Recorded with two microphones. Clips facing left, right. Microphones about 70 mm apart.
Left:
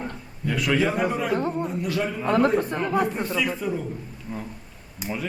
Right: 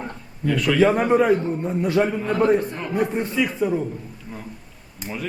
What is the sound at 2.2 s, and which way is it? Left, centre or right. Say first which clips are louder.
Speech: even; left.